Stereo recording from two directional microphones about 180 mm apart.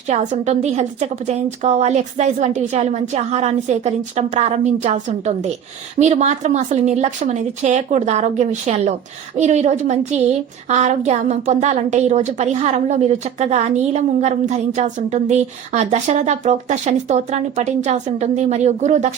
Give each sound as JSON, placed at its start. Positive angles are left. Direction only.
{"t": 0.1, "sound": "a woman's voice", "side_deg": -40}